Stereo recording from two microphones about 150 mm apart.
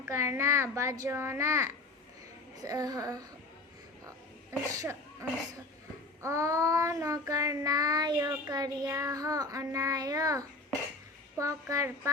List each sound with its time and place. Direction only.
0.0 s child singing: 20° right (ahead or behind)
4.5 s child singing: 20° right (ahead or behind)